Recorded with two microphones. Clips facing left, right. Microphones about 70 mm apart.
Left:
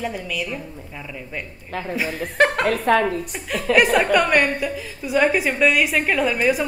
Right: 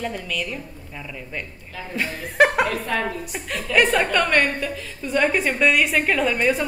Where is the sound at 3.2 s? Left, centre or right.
Centre.